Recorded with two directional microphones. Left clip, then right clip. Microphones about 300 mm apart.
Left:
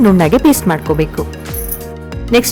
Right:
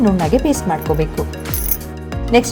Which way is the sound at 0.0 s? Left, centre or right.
Centre.